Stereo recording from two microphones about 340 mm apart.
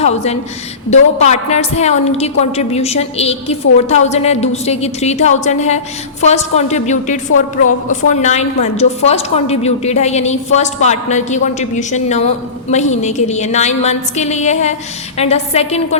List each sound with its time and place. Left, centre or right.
0.0 s a woman's voice: centre
7.3 s a woman's voice: left
8.1 s a woman's voice: centre